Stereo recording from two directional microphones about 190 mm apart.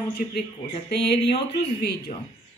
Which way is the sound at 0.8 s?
65° left (ahead or behind).